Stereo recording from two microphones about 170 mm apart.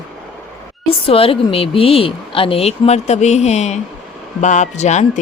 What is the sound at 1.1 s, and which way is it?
Speech, 35° left (ahead or behind).